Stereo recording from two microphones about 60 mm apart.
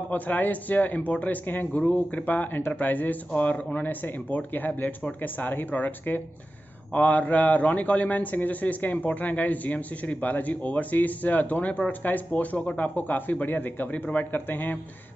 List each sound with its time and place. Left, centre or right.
0.1 s a man's voice: left